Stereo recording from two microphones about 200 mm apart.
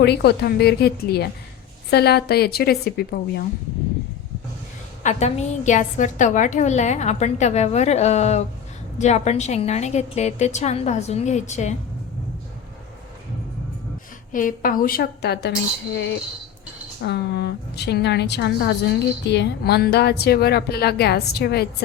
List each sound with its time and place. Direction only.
0.0 s a woman's voice: 55° left (ahead or behind)
5.0 s a woman's voice: 35° left (ahead or behind)
14.3 s a woman's voice: 45° left (ahead or behind)
17.0 s a woman's voice: 55° left (ahead or behind)